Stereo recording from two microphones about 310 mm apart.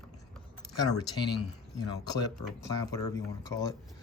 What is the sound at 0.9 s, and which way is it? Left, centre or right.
Speech, left.